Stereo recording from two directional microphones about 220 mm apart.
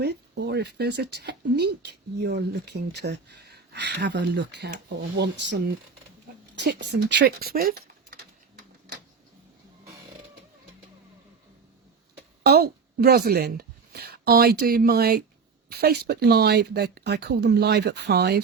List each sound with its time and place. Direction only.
0.0 s speech: 50° right (ahead or behind)
6.6 s a sound: 50° right (ahead or behind)
12.4 s a woman's voice: 45° right (ahead or behind)